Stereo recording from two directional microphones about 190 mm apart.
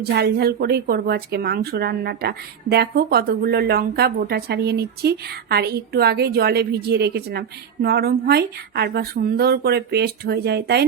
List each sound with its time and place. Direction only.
0.0 s speech: 55° right (ahead or behind)